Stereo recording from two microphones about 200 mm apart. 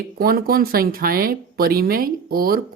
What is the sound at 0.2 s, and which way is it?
Speech, 45° right (ahead or behind).